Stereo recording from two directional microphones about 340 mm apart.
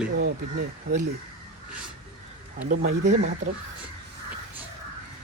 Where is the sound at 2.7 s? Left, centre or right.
Right.